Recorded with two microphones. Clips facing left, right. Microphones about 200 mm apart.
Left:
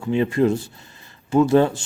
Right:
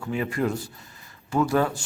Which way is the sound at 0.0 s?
25° left (ahead or behind).